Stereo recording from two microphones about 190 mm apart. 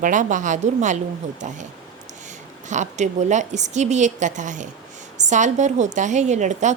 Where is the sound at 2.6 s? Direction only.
40° right (ahead or behind).